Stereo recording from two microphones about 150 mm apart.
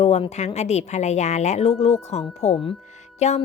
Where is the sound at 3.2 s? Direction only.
50° left (ahead or behind).